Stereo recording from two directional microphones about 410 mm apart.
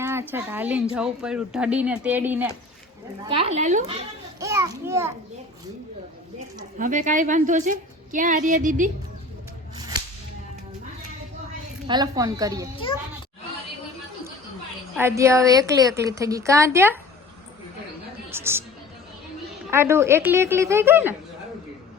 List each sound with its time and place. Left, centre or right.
0.0 s a woman's voice: centre
6.6 s a woman's voice: centre
9.7 s whip: centre
11.9 s a woman's voice: centre
14.9 s a woman's voice: centre
18.3 s a woman's voice: centre
19.7 s a woman's voice: centre